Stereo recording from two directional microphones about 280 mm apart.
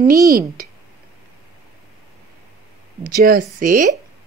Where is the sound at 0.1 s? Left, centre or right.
Right.